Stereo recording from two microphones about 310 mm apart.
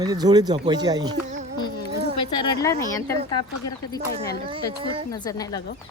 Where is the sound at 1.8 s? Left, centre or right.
Left.